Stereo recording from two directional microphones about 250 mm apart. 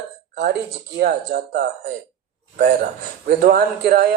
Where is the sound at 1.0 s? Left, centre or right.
Right.